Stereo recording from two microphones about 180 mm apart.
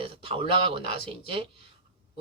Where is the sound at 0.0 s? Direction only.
30° right (ahead or behind).